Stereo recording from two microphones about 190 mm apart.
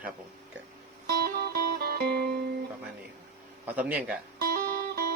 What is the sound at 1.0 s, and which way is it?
Music, 60° right (ahead or behind).